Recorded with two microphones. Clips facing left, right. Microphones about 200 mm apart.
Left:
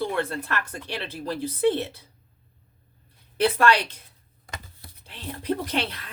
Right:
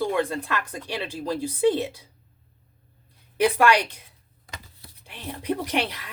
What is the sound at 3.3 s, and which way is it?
Speech, 15° right (ahead or behind).